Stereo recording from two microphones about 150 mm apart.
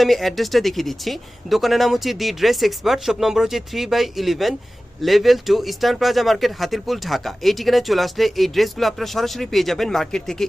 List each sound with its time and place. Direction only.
0.0 s speech: centre (ahead or behind)